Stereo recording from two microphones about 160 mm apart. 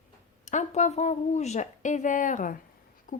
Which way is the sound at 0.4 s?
45° left (ahead or behind).